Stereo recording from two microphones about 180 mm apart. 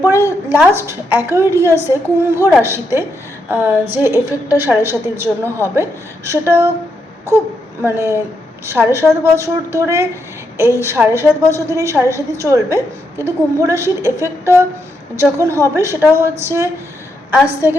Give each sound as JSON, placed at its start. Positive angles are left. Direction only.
{"t": 0.0, "sound": "a sound", "side_deg": -15}
{"t": 0.8, "sound": "a woman's voice", "side_deg": -15}
{"t": 17.3, "sound": "a woman's voice", "side_deg": -10}